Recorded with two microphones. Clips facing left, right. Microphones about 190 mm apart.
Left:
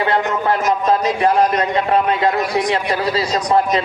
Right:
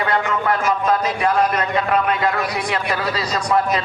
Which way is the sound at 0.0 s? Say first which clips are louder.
Left 3 dB; 25° left (ahead or behind).